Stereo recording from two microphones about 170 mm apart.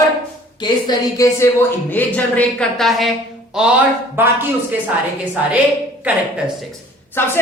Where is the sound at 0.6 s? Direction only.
25° left (ahead or behind); by 4.3 s 10° right (ahead or behind).